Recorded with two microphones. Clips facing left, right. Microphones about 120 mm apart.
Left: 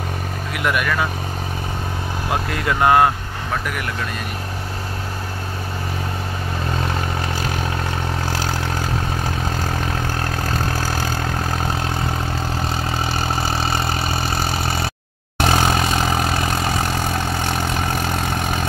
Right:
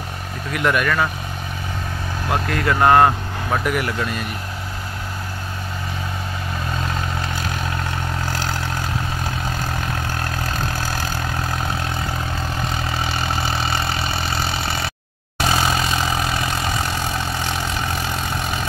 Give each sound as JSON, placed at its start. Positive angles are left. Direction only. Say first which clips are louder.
{"t": 0.7, "sound": "speech", "louder": "right 2 dB", "side_deg": 10}
{"t": 2.3, "sound": "speech", "louder": "right 2 dB", "side_deg": 15}
{"t": 13.0, "sound": "vehicle", "louder": "left 1 dB", "side_deg": 35}
{"t": 15.4, "sound": "vehicle", "louder": "left 2 dB", "side_deg": 50}